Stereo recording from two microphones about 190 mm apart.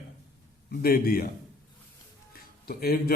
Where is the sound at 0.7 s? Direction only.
50° left (ahead or behind).